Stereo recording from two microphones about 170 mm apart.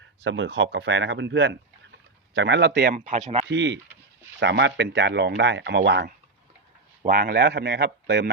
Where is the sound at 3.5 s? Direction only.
90° right.